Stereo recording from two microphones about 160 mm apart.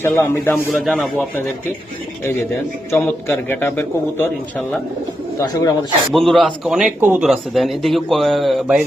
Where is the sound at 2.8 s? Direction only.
15° left (ahead or behind).